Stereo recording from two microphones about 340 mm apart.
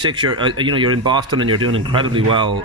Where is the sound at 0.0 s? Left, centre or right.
Centre.